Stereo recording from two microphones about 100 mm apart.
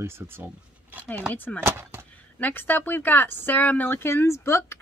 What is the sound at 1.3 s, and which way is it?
Speech, 20° left (ahead or behind).